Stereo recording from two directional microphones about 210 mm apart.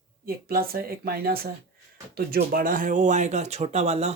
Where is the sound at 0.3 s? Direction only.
45° right (ahead or behind).